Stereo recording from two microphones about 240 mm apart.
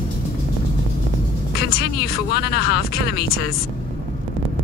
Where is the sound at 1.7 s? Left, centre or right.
Left.